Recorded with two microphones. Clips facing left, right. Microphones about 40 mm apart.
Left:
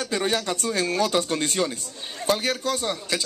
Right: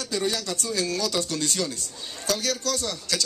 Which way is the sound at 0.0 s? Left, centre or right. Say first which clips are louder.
Left 3 dB; left.